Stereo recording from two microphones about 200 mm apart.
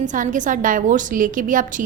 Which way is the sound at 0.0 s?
40° right (ahead or behind).